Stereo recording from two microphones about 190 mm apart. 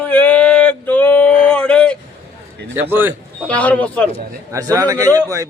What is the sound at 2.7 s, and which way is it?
Speech, 10° right (ahead or behind).